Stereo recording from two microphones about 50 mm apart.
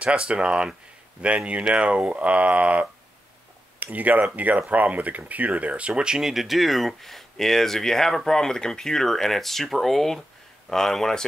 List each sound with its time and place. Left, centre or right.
0.0 s speech: right; by 11.2 s centre